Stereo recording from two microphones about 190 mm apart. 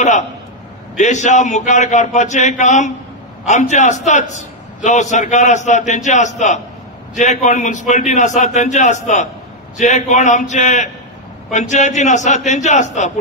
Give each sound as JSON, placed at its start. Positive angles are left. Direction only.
{"t": 0.9, "sound": "a man's voice", "side_deg": 40}